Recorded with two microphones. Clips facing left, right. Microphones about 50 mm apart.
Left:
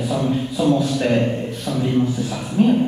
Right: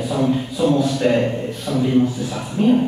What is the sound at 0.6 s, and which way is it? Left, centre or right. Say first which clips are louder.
A man's voice: even; centre.